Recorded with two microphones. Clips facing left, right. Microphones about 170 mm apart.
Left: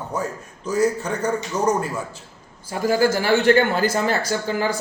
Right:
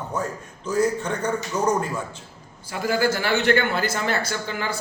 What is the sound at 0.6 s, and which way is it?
A man's voice, 10° left (ahead or behind).